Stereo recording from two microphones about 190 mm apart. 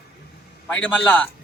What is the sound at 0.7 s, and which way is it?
Speech, 5° left (ahead or behind).